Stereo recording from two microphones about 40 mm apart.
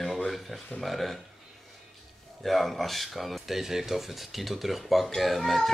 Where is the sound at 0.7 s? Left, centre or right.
Centre.